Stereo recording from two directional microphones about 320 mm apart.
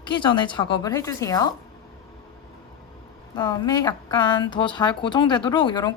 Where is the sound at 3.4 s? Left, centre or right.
Centre.